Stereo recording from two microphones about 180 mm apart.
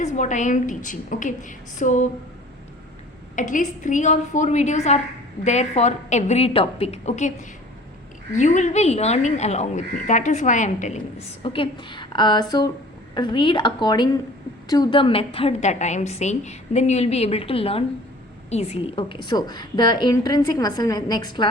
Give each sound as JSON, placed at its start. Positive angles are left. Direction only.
{"t": 0.0, "sound": "a woman's voice", "side_deg": 40}
{"t": 3.3, "sound": "a woman's voice", "side_deg": 45}
{"t": 11.4, "sound": "a woman's voice", "side_deg": 30}